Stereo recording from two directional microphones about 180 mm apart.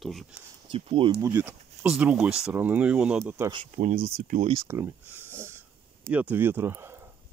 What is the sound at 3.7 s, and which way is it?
Speech, 50° right (ahead or behind).